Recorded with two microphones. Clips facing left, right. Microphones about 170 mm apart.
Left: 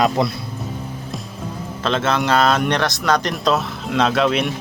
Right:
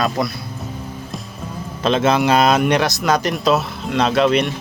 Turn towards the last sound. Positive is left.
turn(degrees=0)  # may be behind; listen again after turning